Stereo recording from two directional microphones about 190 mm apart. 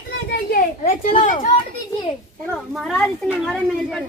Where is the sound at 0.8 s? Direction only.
40° left (ahead or behind).